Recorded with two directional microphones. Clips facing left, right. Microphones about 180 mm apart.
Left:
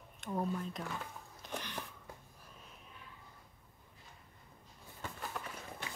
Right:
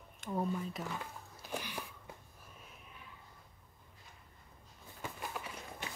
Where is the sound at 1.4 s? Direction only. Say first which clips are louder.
Right 1 dB; 5° right (ahead or behind).